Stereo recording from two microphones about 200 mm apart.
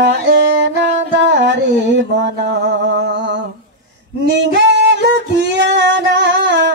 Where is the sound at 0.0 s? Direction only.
60° right (ahead or behind).